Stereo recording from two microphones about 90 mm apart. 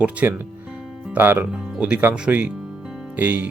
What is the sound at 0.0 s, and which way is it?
Music, 15° right (ahead or behind).